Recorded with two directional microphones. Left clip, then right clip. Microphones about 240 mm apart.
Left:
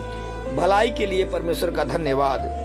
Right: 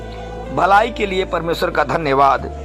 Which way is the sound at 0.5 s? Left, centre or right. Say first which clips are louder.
Right 6 dB; centre.